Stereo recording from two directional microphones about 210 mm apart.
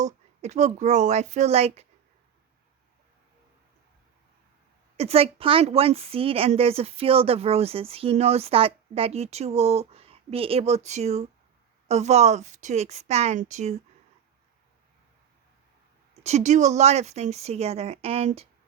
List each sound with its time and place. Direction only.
0.0 s speech: 35° right (ahead or behind)
4.9 s a woman's voice: 30° right (ahead or behind)
16.2 s speech: 35° right (ahead or behind)